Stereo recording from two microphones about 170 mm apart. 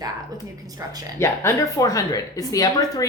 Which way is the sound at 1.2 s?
15° left (ahead or behind).